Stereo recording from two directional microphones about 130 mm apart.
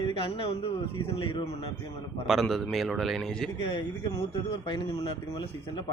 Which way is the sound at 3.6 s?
35° left (ahead or behind).